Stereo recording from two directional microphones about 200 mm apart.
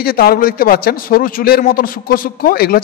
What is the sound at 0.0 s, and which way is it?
A man's voice, 50° left (ahead or behind).